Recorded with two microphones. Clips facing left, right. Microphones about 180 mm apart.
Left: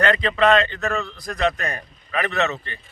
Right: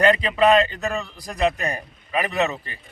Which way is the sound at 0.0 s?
10° right (ahead or behind).